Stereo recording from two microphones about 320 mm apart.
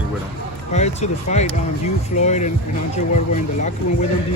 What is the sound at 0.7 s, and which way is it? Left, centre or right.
Speech, left.